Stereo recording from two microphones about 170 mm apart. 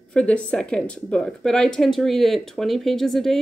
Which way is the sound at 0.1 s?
5° left (ahead or behind).